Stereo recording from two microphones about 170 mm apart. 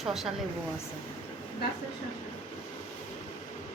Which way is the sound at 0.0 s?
Centre (ahead or behind).